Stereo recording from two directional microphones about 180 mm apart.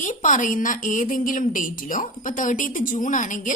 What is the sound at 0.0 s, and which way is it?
A woman's voice, 45° left (ahead or behind).